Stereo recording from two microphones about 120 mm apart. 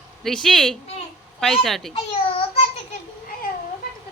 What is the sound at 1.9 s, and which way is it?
Babbling, 55° left (ahead or behind).